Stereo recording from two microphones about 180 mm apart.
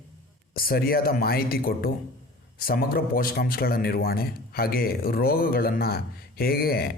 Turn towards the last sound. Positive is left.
turn(degrees=60)  # may be behind; listen again after turning